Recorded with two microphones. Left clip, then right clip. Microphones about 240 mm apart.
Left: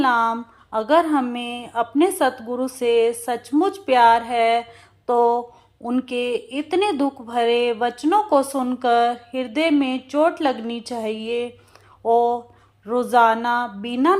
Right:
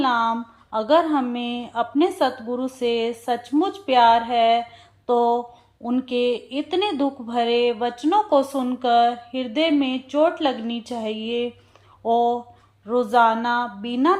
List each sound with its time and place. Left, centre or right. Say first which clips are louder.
0.0 s speech: left 2 dB; centre